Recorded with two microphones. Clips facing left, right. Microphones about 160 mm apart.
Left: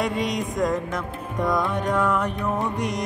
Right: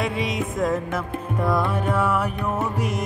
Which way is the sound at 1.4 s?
5° right (ahead or behind).